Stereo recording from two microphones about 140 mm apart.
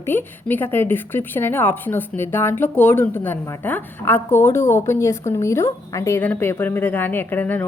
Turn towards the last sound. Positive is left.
turn(degrees=15)  # may be behind; listen again after turning